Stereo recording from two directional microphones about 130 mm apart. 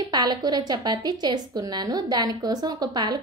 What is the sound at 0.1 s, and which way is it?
Speech, 35° right (ahead or behind).